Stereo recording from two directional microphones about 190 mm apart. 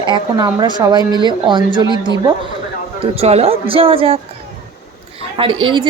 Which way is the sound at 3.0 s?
30° right (ahead or behind).